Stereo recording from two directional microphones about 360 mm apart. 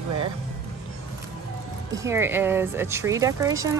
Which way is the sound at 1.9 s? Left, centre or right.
Centre.